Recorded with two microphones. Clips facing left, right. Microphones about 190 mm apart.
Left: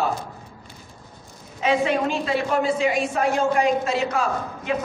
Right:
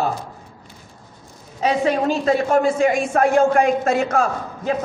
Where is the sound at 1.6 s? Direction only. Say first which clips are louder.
Right 2 dB; 40° right (ahead or behind).